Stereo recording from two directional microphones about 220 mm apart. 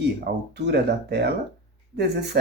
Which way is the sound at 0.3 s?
50° right (ahead or behind).